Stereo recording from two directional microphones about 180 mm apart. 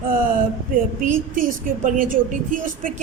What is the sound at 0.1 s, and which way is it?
Speech, 50° right (ahead or behind).